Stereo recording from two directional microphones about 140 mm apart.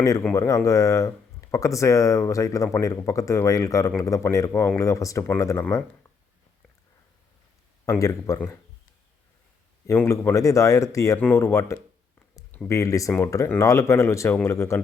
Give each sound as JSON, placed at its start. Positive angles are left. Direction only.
{"t": 0.3, "sound": "speech", "side_deg": 25}
{"t": 7.9, "sound": "speech", "side_deg": 20}
{"t": 9.8, "sound": "speech", "side_deg": 20}